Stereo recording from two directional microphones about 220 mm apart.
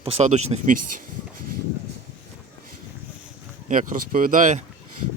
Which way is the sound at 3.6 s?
35° right (ahead or behind).